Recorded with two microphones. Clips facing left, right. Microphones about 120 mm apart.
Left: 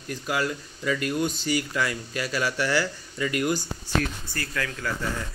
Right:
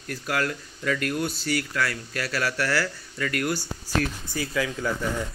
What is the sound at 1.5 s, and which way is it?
A man's voice, 10° left (ahead or behind).